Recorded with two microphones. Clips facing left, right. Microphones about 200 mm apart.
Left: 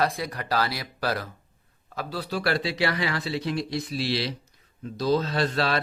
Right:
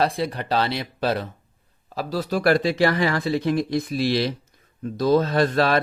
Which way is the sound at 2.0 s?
40° right (ahead or behind).